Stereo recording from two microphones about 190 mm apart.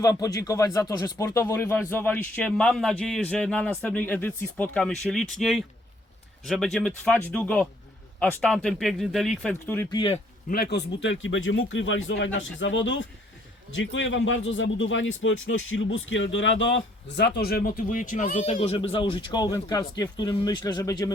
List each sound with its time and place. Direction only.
0.0 s speech: 20° left (ahead or behind)
9.9 s speech: 25° left (ahead or behind)
10.5 s speech: 55° left (ahead or behind); by 21.1 s 20° left (ahead or behind)